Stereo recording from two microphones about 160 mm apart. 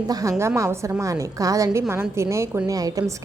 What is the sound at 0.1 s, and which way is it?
A woman's voice, 20° right (ahead or behind).